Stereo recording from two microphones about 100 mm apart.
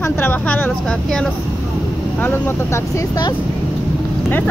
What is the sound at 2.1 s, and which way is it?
Speech, 20° left (ahead or behind).